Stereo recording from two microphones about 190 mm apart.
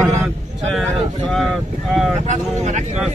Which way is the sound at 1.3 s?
Centre (ahead or behind).